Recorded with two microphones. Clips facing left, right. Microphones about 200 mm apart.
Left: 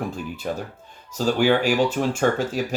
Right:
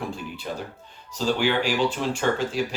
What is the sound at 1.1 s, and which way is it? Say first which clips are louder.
Speech: left 4 dB; 45° left (ahead or behind).